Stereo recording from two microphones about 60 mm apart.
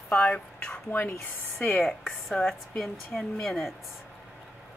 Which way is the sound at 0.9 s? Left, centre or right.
Left.